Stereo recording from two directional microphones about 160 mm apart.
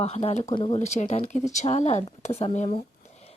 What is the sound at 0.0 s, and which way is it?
Speech, 40° left (ahead or behind).